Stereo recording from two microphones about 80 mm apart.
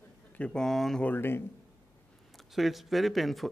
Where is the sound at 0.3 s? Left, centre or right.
Centre.